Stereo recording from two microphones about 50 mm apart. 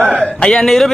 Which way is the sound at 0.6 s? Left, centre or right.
Centre.